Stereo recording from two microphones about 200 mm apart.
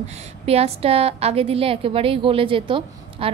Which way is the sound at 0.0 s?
30° right (ahead or behind).